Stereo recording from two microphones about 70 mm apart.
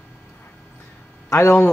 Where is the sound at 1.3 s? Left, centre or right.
Left.